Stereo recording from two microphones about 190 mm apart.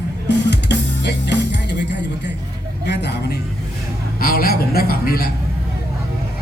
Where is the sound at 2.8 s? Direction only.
65° left (ahead or behind).